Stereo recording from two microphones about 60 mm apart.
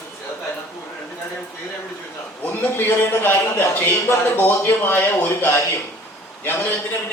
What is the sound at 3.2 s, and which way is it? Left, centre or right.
A man's voice, left.